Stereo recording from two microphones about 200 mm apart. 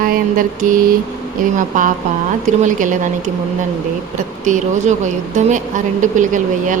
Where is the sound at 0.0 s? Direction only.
45° right (ahead or behind).